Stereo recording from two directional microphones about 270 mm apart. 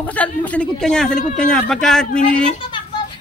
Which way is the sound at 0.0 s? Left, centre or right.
Centre.